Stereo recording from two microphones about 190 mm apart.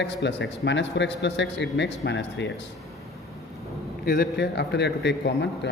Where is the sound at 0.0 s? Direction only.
65° left (ahead or behind).